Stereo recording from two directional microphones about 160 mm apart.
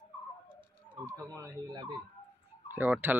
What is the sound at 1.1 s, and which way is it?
Speech, 20° right (ahead or behind).